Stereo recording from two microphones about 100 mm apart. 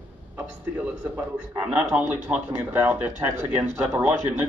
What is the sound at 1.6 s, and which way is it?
A man's voice, 15° right (ahead or behind).